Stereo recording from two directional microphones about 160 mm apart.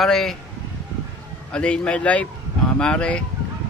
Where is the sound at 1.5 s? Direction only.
5° left (ahead or behind).